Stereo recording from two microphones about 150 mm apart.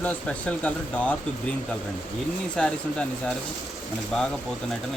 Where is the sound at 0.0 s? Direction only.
10° left (ahead or behind).